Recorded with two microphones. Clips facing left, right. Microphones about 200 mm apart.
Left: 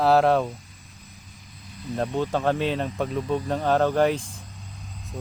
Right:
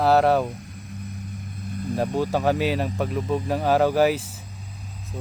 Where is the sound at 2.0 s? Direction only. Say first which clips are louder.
Right 1 dB; 10° right (ahead or behind).